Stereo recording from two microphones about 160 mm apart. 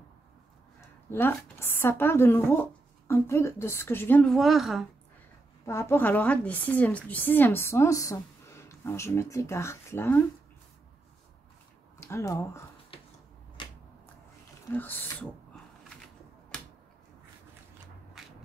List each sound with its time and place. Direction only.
0.7 s a woman's voice: 15° left (ahead or behind); by 4.8 s centre (ahead or behind)
5.7 s a woman's voice: 15° left (ahead or behind)
12.0 s a woman's voice: 20° left (ahead or behind)
13.6 s a sound: 30° left (ahead or behind)
14.7 s a woman's voice: 10° left (ahead or behind)